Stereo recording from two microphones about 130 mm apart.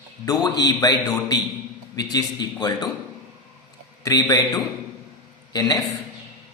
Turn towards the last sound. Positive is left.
turn(degrees=30)  # may be behind; listen again after turning